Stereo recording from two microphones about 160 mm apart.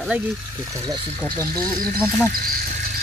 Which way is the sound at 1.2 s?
10° left (ahead or behind).